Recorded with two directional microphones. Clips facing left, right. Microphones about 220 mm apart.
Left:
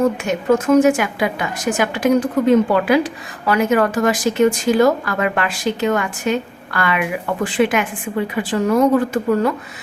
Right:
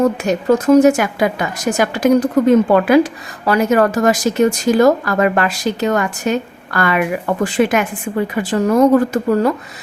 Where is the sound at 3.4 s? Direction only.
40° right (ahead or behind).